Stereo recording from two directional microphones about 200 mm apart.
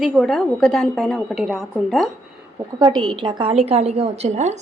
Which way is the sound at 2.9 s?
25° right (ahead or behind).